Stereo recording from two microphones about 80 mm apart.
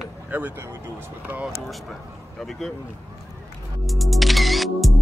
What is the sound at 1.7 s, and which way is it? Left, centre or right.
Music, centre.